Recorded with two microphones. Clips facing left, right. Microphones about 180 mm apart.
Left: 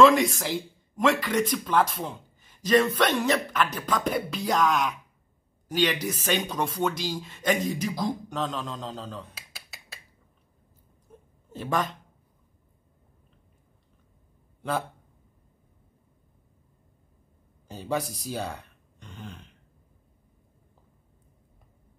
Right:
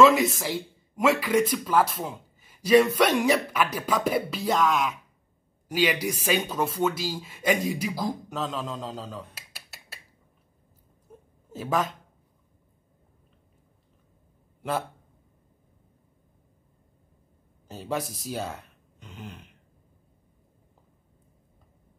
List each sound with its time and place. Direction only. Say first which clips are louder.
0.0 s speech: even; 5° right (ahead or behind)
11.5 s speech: right 1 dB; 5° right (ahead or behind)
14.6 s speech: even; centre (ahead or behind)
17.6 s speech: left 1 dB; centre (ahead or behind)